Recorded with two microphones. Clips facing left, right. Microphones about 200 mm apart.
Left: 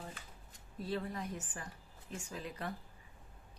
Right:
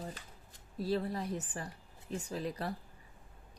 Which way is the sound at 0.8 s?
35° right (ahead or behind).